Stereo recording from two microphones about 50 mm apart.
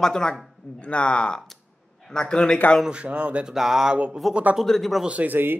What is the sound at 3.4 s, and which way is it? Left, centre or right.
Speech, centre.